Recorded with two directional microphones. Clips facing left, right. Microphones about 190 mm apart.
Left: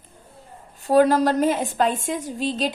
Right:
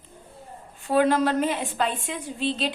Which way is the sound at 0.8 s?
40° left (ahead or behind).